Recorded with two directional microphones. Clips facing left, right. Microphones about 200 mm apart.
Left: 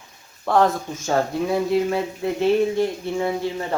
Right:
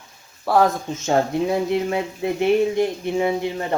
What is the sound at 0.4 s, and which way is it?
Speech, 5° right (ahead or behind).